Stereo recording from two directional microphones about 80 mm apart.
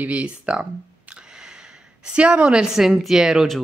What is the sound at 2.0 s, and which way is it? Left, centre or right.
Speech, centre.